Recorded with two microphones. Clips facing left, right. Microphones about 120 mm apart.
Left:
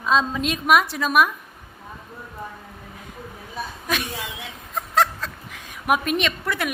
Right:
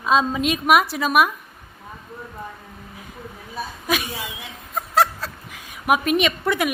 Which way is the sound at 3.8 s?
5° right (ahead or behind).